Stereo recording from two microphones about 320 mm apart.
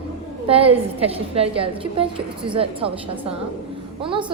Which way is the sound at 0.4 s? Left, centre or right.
Centre.